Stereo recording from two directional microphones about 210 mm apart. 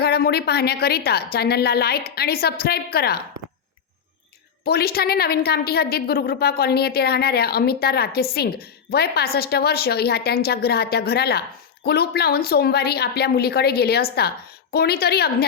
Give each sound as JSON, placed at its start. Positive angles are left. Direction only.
{"t": 0.0, "sound": "a woman's voice", "side_deg": 50}
{"t": 4.6, "sound": "a woman's voice", "side_deg": 50}